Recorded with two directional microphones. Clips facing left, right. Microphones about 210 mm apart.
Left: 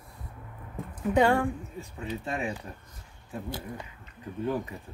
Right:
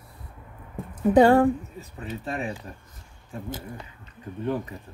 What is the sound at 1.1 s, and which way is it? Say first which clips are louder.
Speech: right 7 dB; 35° right (ahead or behind).